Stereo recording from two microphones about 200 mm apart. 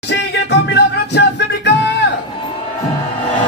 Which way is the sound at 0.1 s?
60° left (ahead or behind).